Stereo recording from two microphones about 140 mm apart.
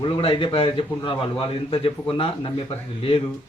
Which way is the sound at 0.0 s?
40° left (ahead or behind).